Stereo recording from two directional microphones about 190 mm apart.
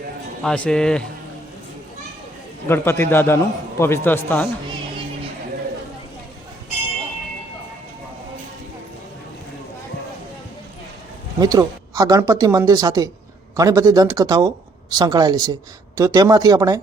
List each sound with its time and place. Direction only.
0.4 s speech: 5° left (ahead or behind)
2.6 s a man's voice: 10° left (ahead or behind)
11.3 s speech: 20° right (ahead or behind)